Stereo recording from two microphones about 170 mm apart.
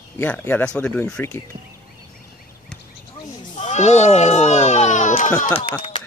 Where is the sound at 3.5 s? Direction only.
45° left (ahead or behind).